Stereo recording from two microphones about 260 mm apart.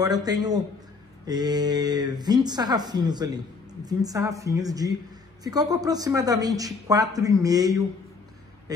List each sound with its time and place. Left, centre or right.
0.0 s speech: centre